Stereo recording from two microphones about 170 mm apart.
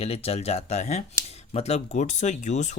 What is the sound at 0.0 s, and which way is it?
Speech, 35° left (ahead or behind).